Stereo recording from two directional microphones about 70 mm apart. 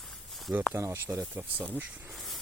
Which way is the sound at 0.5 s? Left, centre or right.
Right.